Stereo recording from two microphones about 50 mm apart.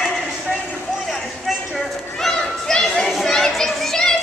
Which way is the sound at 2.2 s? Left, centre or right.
Centre.